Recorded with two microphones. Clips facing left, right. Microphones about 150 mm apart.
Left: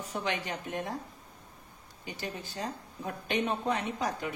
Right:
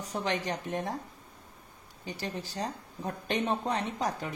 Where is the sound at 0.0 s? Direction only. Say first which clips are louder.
Right 2 dB; 40° right (ahead or behind).